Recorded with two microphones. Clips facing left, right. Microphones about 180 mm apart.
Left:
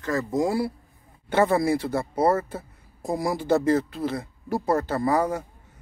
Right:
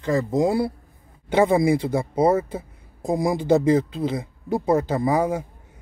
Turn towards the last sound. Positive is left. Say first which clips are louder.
# right 2 dB
turn(degrees=-10)  # may be behind; listen again after turning